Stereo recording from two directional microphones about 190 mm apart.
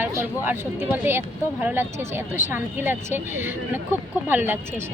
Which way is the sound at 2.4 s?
10° right (ahead or behind).